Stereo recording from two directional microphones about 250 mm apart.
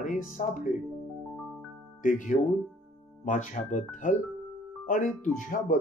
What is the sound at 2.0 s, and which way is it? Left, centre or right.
Speech, left.